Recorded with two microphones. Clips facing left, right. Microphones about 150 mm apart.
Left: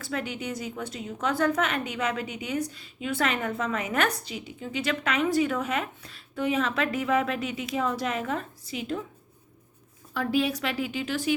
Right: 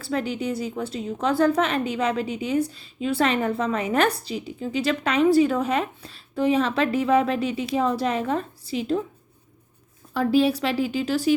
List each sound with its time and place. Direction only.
0.0 s a woman's voice: 35° right (ahead or behind)
10.2 s a woman's voice: 35° right (ahead or behind)